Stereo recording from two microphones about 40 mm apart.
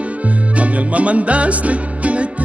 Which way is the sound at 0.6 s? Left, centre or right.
Right.